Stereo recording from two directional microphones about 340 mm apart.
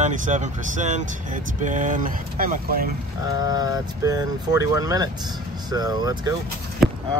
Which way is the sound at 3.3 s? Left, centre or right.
Centre.